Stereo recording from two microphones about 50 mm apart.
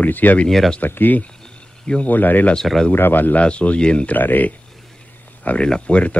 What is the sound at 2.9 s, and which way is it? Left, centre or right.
Speech, left.